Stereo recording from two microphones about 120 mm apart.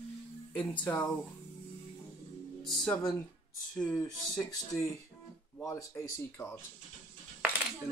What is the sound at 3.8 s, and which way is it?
Speech, 30° left (ahead or behind).